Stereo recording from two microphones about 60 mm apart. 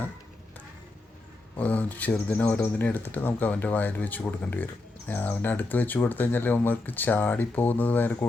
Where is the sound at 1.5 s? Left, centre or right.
Left.